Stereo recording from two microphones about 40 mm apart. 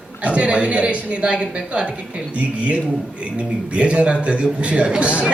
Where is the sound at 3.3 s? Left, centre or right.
Right.